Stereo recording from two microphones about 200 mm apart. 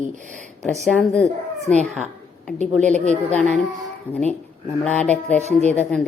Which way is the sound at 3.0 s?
35° right (ahead or behind).